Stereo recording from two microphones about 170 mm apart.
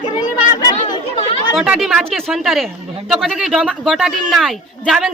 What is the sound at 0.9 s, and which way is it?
Chatter, 35° left (ahead or behind).